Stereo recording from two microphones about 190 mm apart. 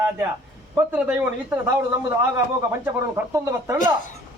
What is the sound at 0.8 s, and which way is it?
A man's voice, 10° right (ahead or behind).